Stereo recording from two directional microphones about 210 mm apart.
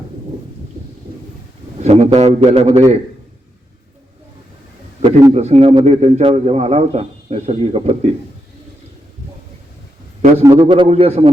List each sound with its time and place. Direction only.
1.8 s a man's voice: 30° right (ahead or behind)
5.0 s a man's voice: 25° right (ahead or behind)
10.4 s a man's voice: 20° right (ahead or behind)